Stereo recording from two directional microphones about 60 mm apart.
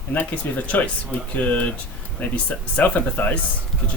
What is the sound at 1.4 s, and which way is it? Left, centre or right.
Speech, left.